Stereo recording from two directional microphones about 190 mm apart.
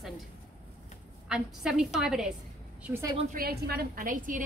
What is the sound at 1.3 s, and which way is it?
A woman's voice, 5° right (ahead or behind).